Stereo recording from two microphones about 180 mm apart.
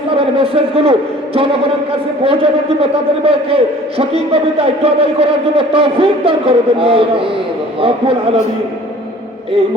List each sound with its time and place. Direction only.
0.2 s a man's voice: 30° right (ahead or behind)